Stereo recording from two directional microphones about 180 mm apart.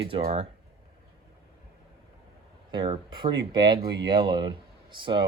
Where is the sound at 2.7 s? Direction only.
25° right (ahead or behind).